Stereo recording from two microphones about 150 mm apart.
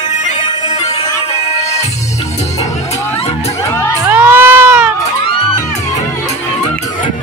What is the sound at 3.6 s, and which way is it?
Music, 20° left (ahead or behind).